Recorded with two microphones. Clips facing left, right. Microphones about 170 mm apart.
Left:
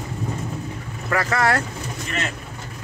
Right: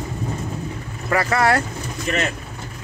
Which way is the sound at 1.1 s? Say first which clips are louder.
Right 2 dB; 10° right (ahead or behind).